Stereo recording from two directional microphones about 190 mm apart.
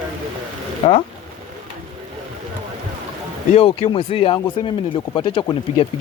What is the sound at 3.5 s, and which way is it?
Speech, 30° left (ahead or behind).